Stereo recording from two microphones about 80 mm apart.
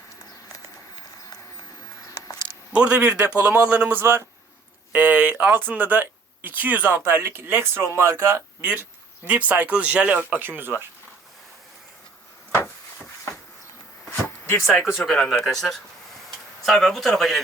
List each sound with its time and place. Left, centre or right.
2.7 s a man's voice: centre; by 8.4 s right
8.6 s speech: right
14.1 s a sound: left
14.9 s a man's voice: centre